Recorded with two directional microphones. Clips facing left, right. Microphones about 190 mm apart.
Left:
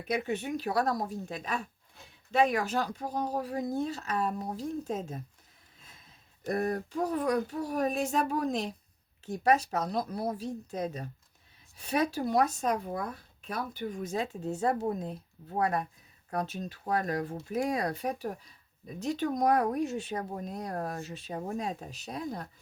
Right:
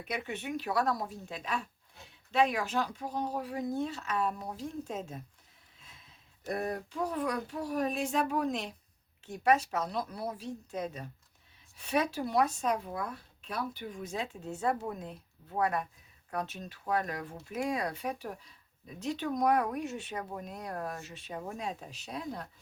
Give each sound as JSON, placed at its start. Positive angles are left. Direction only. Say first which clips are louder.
{"t": 0.1, "sound": "speech", "louder": "left 5 dB", "side_deg": 40}
{"t": 6.5, "sound": "a sound", "louder": "left 4 dB", "side_deg": 45}
{"t": 9.2, "sound": "speech", "louder": "left 1 dB", "side_deg": 35}